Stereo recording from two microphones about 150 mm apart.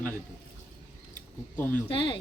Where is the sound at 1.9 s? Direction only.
35° left (ahead or behind).